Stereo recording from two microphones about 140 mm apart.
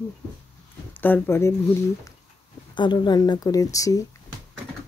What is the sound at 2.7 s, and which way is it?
Speech, 35° left (ahead or behind).